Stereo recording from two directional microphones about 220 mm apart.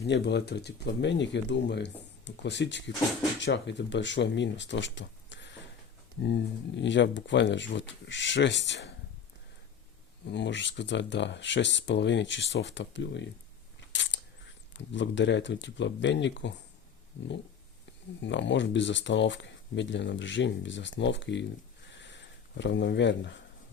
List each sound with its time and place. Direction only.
0.0 s speech: 50° left (ahead or behind)
10.3 s speech: 55° left (ahead or behind)
13.9 s camera: 55° left (ahead or behind)
14.9 s speech: 55° left (ahead or behind)
18.2 s speech: 55° left (ahead or behind)
21.9 s a sound: 55° left (ahead or behind)